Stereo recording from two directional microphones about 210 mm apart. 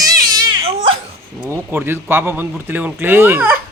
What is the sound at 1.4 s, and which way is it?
Speech, 10° right (ahead or behind).